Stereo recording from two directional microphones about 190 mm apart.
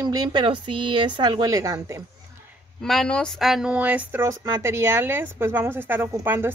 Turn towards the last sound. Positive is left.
turn(degrees=-10)  # may be behind; listen again after turning